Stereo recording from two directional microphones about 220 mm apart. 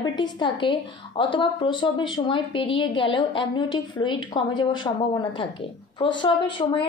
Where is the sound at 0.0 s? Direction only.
20° left (ahead or behind).